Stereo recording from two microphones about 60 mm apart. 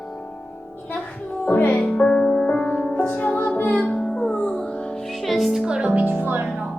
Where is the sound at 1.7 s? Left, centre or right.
Left; by 5.6 s centre.